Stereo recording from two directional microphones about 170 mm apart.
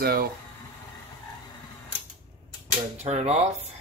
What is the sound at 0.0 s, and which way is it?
Speech, 65° right (ahead or behind).